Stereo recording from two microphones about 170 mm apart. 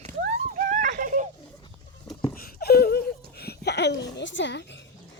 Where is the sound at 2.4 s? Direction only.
60° left (ahead or behind); by 4.7 s 90° left.